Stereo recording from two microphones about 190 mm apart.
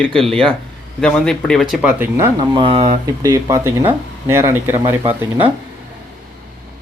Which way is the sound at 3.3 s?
15° right (ahead or behind).